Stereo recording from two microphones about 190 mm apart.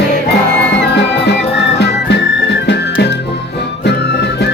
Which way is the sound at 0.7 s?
65° left (ahead or behind).